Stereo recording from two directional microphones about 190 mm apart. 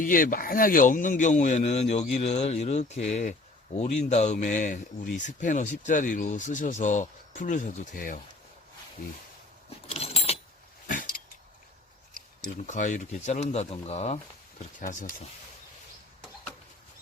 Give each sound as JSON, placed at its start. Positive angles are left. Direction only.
{"t": 0.0, "sound": "speech", "side_deg": 45}
{"t": 9.9, "sound": "keys jangling", "side_deg": 30}
{"t": 10.8, "sound": "dog", "side_deg": 45}
{"t": 12.4, "sound": "speech", "side_deg": 40}